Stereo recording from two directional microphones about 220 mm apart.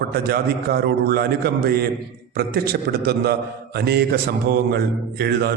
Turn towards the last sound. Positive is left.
turn(degrees=-45)  # may be behind; listen again after turning